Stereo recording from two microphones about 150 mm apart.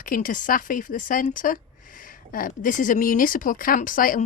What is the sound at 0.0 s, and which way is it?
Speech, 65° left (ahead or behind).